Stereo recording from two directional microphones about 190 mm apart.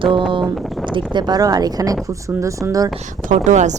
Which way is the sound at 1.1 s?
20° right (ahead or behind).